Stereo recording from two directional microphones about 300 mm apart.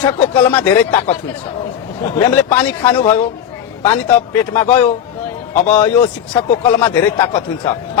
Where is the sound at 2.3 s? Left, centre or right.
Centre.